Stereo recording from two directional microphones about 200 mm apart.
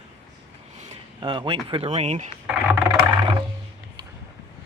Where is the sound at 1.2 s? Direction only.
25° right (ahead or behind).